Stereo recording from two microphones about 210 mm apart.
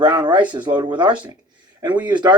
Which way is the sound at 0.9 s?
25° right (ahead or behind).